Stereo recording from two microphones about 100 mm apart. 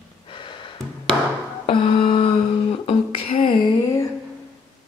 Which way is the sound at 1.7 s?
60° left (ahead or behind).